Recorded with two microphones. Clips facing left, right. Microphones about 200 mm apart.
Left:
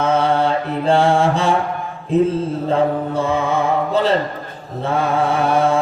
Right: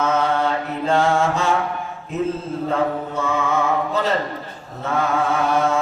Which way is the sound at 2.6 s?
30° left (ahead or behind).